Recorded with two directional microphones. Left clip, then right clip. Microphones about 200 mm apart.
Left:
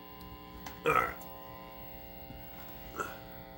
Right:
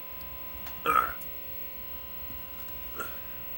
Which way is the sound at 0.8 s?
20° left (ahead or behind).